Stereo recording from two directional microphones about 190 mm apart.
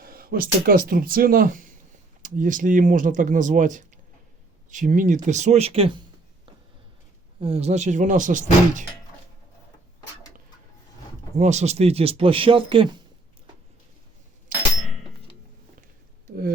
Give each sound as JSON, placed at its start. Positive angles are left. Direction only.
{"t": 0.0, "sound": "speech", "side_deg": -50}
{"t": 7.4, "sound": "speech", "side_deg": -35}
{"t": 11.3, "sound": "speech", "side_deg": -40}